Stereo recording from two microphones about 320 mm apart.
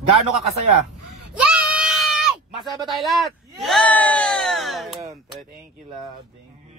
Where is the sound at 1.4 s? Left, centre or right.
Centre.